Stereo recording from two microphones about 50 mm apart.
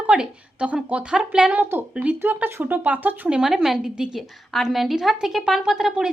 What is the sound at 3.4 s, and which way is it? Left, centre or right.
Speech, centre.